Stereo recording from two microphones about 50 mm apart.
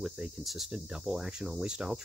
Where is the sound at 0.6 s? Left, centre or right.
Centre.